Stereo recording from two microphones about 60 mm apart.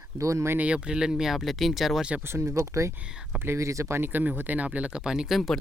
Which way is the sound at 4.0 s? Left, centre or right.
Right.